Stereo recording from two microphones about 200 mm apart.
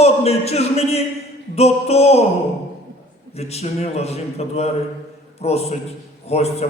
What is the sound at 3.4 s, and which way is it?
Speech, 30° left (ahead or behind).